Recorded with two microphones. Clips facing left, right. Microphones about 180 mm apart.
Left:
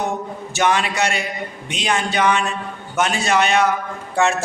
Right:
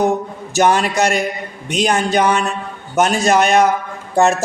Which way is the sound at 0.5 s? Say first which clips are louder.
Right 5 dB; 40° right (ahead or behind).